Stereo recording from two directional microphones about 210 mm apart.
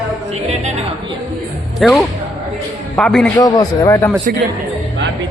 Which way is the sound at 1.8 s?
Centre (ahead or behind).